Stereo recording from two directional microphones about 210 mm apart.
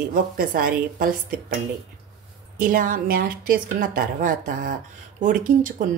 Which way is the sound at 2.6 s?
40° right (ahead or behind).